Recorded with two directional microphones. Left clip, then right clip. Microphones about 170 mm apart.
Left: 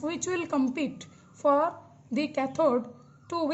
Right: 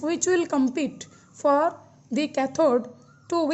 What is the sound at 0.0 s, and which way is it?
A woman's voice, 30° right (ahead or behind).